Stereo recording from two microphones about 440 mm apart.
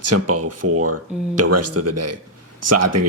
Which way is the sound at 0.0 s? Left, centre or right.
Right.